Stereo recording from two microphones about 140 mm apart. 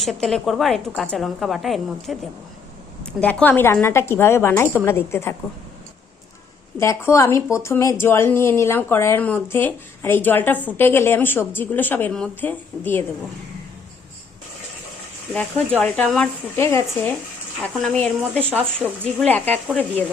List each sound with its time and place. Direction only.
0.0 s a woman's voice: centre (ahead or behind)
3.2 s speech: 10° left (ahead or behind)
6.7 s a woman's voice: 20° left (ahead or behind)
15.3 s speech: 10° left (ahead or behind)
16.6 s speech: 15° left (ahead or behind)
17.7 s a woman's voice: 5° left (ahead or behind)